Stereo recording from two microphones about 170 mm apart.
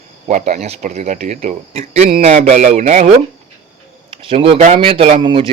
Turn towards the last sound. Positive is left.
turn(degrees=-30)  # may be behind; listen again after turning